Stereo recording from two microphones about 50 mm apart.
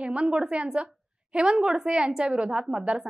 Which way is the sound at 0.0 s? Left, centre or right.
Right.